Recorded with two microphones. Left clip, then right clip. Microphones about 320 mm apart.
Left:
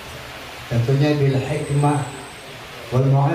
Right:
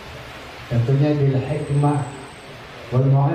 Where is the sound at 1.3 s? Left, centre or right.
Right.